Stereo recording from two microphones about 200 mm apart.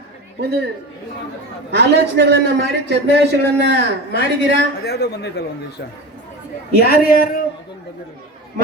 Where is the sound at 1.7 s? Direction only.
60° right (ahead or behind).